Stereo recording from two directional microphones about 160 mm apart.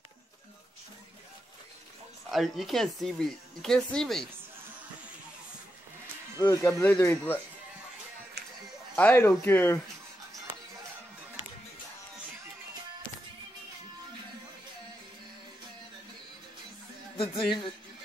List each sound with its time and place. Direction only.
2.3 s speech: centre (ahead or behind)
6.4 s speech: 15° left (ahead or behind)
8.9 s speech: 10° left (ahead or behind)
17.2 s speech: 35° left (ahead or behind)